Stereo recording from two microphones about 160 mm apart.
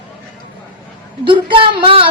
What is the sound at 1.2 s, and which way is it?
Speech, 30° right (ahead or behind).